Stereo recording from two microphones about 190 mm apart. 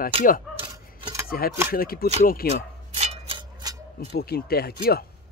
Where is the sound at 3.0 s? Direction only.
35° right (ahead or behind).